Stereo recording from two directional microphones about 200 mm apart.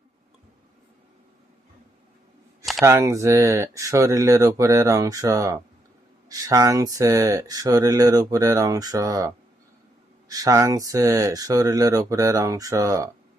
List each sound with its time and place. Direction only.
2.8 s speech: 15° right (ahead or behind)